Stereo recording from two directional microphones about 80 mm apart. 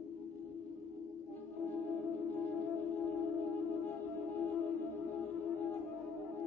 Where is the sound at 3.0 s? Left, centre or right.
Left.